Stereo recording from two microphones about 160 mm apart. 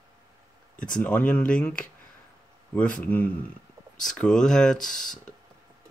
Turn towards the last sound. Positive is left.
turn(degrees=5)  # may be behind; listen again after turning